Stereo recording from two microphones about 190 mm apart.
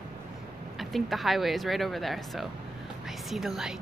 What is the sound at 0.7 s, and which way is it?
Speech, centre (ahead or behind).